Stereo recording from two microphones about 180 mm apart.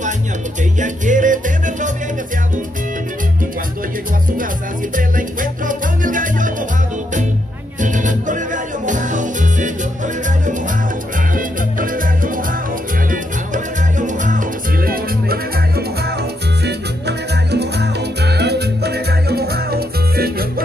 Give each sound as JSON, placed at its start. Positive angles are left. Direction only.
{"t": 0.7, "sound": "music", "side_deg": -45}
{"t": 4.9, "sound": "music", "side_deg": -50}
{"t": 7.8, "sound": "music", "side_deg": -45}
{"t": 13.9, "sound": "music", "side_deg": -45}
{"t": 16.6, "sound": "music", "side_deg": -70}